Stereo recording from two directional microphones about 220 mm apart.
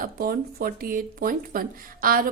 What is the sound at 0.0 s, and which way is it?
Speech, 40° right (ahead or behind).